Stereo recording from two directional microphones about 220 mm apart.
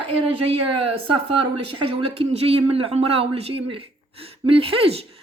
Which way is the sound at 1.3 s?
25° right (ahead or behind).